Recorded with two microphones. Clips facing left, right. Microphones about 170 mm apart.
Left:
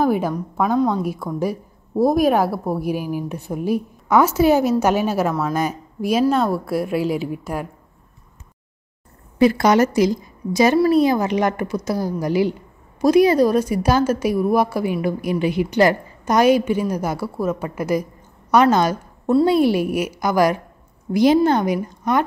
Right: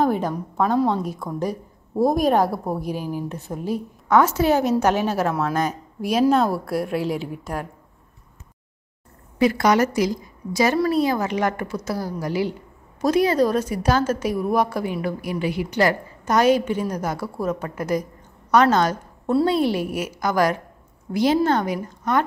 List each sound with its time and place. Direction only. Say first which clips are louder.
0.0 s a woman's voice: left 2 dB; 5° left (ahead or behind)
9.4 s a woman's voice: left 3 dB; 30° left (ahead or behind); by 15.0 s 10° left (ahead or behind)
15.0 s a woman's voice: left 5 dB; 20° left (ahead or behind)